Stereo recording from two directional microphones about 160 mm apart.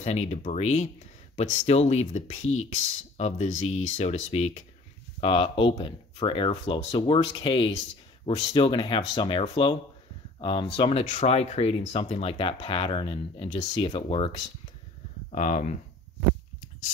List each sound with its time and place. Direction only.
0.0 s speech: 45° left (ahead or behind)
10.4 s speech: 30° left (ahead or behind)
15.3 s speech: 50° left (ahead or behind)